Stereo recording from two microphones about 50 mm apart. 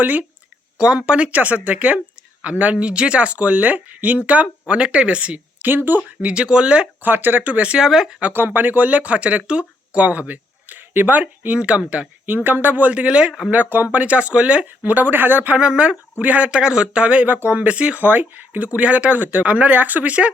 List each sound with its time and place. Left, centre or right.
0.0 s speech: right
0.8 s speech: centre; by 4.2 s right
4.6 s speech: centre
5.6 s speech: right
6.2 s speech: centre
7.0 s speech: right; by 8.2 s centre
8.3 s speech: right
12.2 s speech: right; by 13.3 s centre
13.5 s speech: right
14.8 s speech: right
15.5 s speech: right
17.2 s speech: right
18.0 s speech: right